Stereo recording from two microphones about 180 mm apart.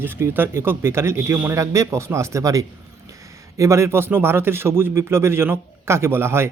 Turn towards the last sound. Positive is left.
turn(degrees=-15)  # may be behind; listen again after turning